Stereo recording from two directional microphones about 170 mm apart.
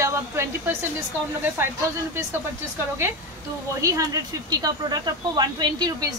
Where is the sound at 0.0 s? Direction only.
15° right (ahead or behind).